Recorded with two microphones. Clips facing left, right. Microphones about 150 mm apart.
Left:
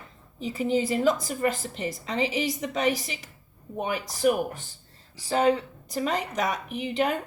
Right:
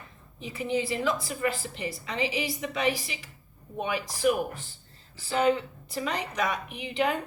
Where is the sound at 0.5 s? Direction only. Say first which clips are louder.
Left 4 dB; 45° left (ahead or behind).